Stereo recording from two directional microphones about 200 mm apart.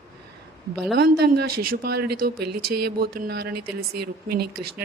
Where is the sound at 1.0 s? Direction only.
50° right (ahead or behind).